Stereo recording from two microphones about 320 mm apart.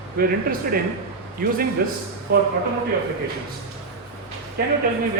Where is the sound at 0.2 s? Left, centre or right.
Right.